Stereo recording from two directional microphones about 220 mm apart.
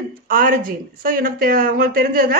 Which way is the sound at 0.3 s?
40° right (ahead or behind).